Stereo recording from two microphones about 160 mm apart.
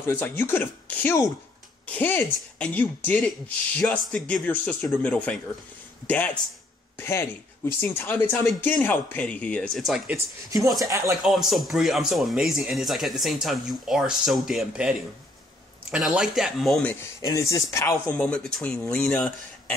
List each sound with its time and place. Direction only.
0.0 s speech: 15° left (ahead or behind); by 10.1 s centre (ahead or behind)
10.1 s speech: 20° right (ahead or behind)
11.2 s speech: centre (ahead or behind)
17.2 s speech: 20° left (ahead or behind)
18.2 s speech: 5° left (ahead or behind)